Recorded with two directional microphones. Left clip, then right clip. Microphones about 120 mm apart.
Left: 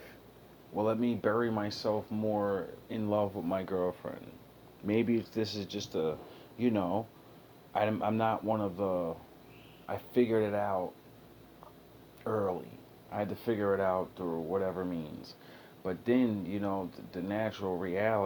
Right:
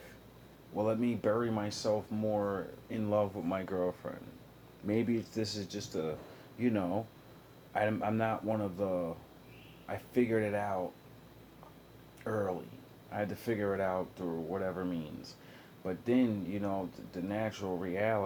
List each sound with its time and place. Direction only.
0.8 s speech: 25° left (ahead or behind)
6.6 s speech: 35° left (ahead or behind)
12.2 s speech: 25° left (ahead or behind)